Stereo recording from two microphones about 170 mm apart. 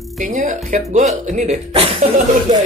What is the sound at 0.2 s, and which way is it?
Speech, 50° right (ahead or behind).